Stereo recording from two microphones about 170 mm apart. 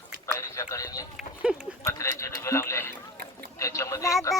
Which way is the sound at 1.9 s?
20° left (ahead or behind).